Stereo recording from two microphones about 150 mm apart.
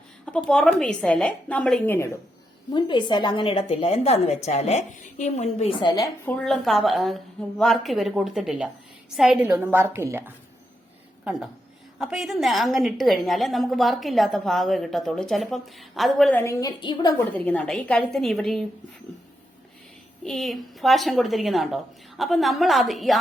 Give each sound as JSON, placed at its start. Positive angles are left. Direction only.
{"t": 0.3, "sound": "a woman's voice", "side_deg": 5}
{"t": 2.7, "sound": "a woman's voice", "side_deg": 30}
{"t": 5.7, "sound": "a woman's voice", "side_deg": 30}
{"t": 6.2, "sound": "a woman's voice", "side_deg": 5}
{"t": 11.9, "sound": "a woman's voice", "side_deg": -5}
{"t": 16.4, "sound": "a woman's voice", "side_deg": 20}
{"t": 17.3, "sound": "a woman's voice", "side_deg": 10}
{"t": 20.2, "sound": "a woman's voice", "side_deg": 0}